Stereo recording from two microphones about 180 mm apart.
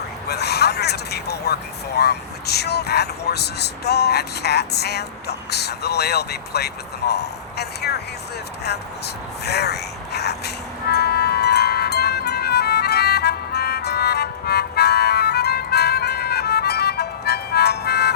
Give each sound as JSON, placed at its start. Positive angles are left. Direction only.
{"t": 0.3, "sound": "a sound", "side_deg": 65}
{"t": 2.0, "sound": "speech", "side_deg": 65}
{"t": 9.4, "sound": "music", "side_deg": 65}